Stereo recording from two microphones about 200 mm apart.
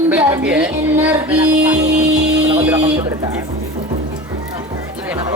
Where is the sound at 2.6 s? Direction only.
10° right (ahead or behind).